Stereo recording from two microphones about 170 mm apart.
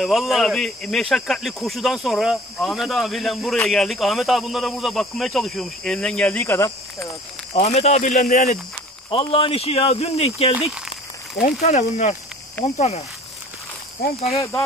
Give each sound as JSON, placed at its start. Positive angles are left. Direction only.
{"t": 0.0, "sound": "speech", "side_deg": 0}
{"t": 7.5, "sound": "speech", "side_deg": 40}
{"t": 9.1, "sound": "speech", "side_deg": 30}
{"t": 11.6, "sound": "speech", "side_deg": 40}
{"t": 14.0, "sound": "speech", "side_deg": 65}